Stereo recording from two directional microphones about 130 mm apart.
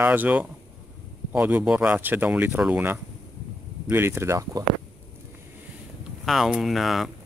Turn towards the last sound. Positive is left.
turn(degrees=0)  # may be behind; listen again after turning